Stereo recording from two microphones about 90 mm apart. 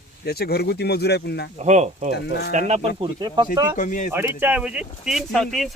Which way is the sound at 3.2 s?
50° right (ahead or behind).